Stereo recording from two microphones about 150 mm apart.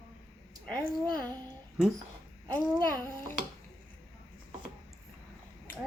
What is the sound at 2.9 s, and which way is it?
Babbling, 15° left (ahead or behind).